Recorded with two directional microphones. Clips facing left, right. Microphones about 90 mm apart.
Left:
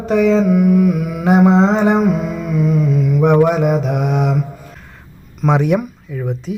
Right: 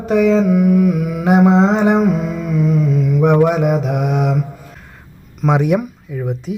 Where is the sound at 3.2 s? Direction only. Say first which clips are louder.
Left 1 dB; centre (ahead or behind).